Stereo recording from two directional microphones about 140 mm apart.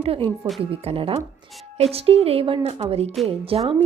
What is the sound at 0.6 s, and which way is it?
A woman's voice, 40° right (ahead or behind).